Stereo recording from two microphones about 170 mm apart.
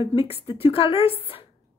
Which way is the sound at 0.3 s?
35° left (ahead or behind).